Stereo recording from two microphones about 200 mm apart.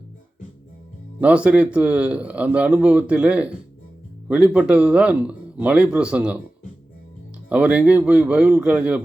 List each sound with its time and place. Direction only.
1.2 s speech: 5° right (ahead or behind)
7.5 s speech: 5° right (ahead or behind)